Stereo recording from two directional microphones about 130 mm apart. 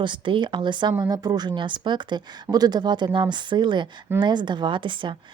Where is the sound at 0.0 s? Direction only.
40° right (ahead or behind).